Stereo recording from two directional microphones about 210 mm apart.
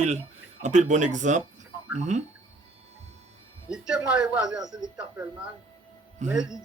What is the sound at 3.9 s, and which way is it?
Speech, 5° right (ahead or behind).